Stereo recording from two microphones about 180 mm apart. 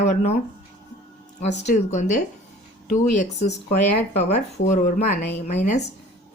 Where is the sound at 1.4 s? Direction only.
40° left (ahead or behind).